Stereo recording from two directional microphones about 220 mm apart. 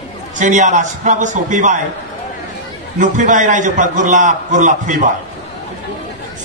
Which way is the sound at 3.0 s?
35° right (ahead or behind).